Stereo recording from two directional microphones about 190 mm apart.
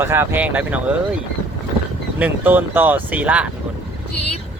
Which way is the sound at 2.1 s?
10° right (ahead or behind).